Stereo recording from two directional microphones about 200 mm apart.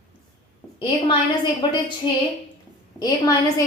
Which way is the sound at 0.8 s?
25° left (ahead or behind).